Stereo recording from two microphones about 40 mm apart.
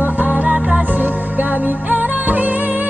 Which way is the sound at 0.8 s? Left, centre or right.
Right.